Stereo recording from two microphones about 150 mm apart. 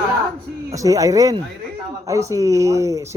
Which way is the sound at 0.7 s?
20° right (ahead or behind).